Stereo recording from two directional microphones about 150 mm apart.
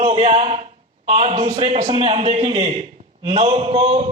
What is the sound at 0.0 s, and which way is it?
A man's voice, 40° right (ahead or behind).